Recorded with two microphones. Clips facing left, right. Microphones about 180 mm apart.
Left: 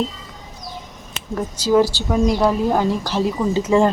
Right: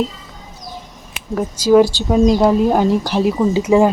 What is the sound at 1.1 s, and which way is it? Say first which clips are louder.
A woman's voice: right 4 dB; 10° right (ahead or behind).